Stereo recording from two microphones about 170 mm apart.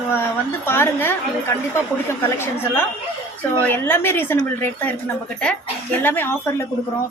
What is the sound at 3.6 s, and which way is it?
A woman's voice, 10° left (ahead or behind).